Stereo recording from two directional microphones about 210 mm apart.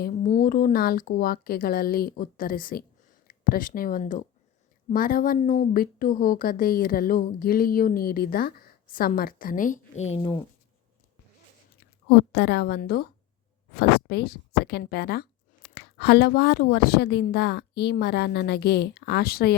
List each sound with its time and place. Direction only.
0.0 s speech: 40° left (ahead or behind)
12.3 s speech: 50° left (ahead or behind)